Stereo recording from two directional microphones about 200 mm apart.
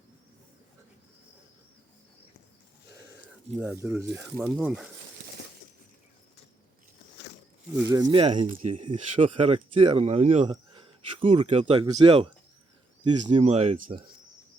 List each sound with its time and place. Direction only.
3.6 s speech: 10° right (ahead or behind)
7.8 s speech: 15° right (ahead or behind)
8.0 s speech: 30° right (ahead or behind)
8.4 s speech: 40° right (ahead or behind)
8.7 s speech: 25° right (ahead or behind)